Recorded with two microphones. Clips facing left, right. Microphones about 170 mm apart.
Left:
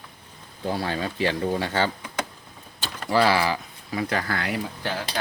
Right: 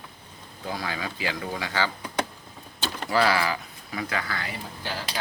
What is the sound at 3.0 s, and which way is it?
Speech, 30° left (ahead or behind).